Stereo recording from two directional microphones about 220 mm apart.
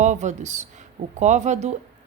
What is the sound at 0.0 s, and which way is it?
A woman's voice, 35° right (ahead or behind).